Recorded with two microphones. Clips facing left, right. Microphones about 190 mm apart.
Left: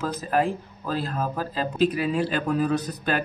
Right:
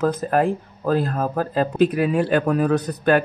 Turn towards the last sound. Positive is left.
turn(degrees=-55)  # may be behind; listen again after turning